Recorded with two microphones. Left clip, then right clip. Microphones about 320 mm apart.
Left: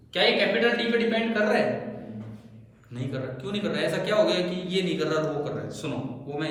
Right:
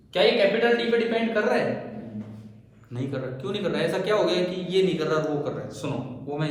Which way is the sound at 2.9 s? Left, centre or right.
Centre.